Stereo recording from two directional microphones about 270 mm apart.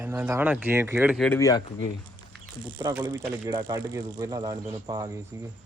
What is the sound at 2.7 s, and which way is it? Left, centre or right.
Speech, centre.